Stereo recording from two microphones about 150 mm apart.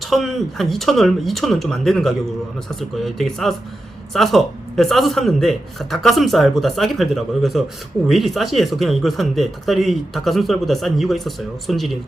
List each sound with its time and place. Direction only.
0.1 s speech: centre (ahead or behind)